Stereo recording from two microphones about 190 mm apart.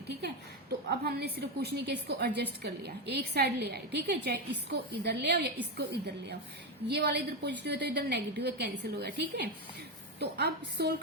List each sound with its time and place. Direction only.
0.9 s a woman's voice: 55° right (ahead or behind)